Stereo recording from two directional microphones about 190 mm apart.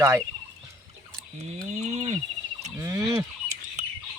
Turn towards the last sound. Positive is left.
turn(degrees=-40)  # may be behind; listen again after turning